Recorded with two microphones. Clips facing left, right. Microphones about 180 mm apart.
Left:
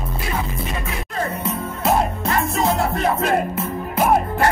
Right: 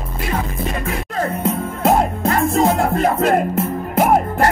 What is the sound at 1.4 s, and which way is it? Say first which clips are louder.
Music: right 5 dB; 50° right (ahead or behind).